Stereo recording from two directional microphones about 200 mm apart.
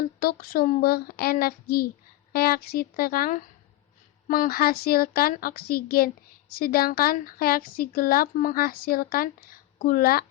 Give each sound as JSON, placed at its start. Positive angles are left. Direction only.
{"t": 0.2, "sound": "speech", "side_deg": 45}